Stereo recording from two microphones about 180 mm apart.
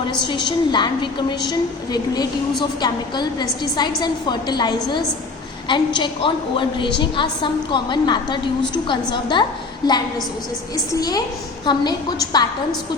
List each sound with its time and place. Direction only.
0.3 s a woman's voice: 25° left (ahead or behind)
11.6 s a woman's voice: 25° left (ahead or behind)